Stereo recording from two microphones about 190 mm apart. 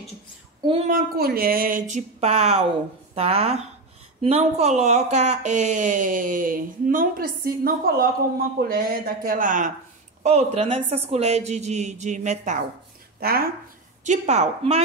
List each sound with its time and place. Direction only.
0.6 s speech: 25° right (ahead or behind)
0.8 s speech: 50° right (ahead or behind)
13.2 s speech: 50° right (ahead or behind)
14.0 s speech: 40° right (ahead or behind)